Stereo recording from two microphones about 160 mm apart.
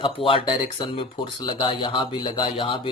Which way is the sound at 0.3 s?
30° left (ahead or behind).